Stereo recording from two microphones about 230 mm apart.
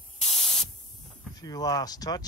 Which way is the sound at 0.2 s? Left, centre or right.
Left.